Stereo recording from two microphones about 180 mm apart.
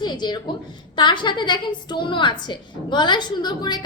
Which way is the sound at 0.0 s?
25° left (ahead or behind).